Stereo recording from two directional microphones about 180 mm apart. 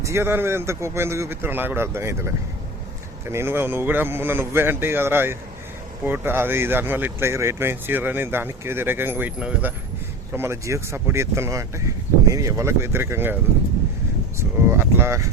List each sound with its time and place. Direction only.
0.0 s speech: 15° right (ahead or behind)
14.3 s speech: 15° right (ahead or behind)